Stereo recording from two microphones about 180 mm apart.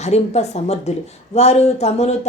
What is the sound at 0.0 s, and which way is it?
A woman's voice, 40° left (ahead or behind).